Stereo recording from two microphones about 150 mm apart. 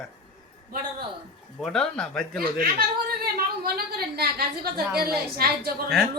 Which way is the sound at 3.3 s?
85° right.